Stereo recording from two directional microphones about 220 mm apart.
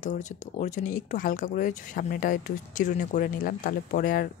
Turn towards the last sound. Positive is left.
turn(degrees=40)  # may be behind; listen again after turning